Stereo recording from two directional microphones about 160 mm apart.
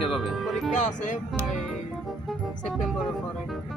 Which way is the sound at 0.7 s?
50° left (ahead or behind).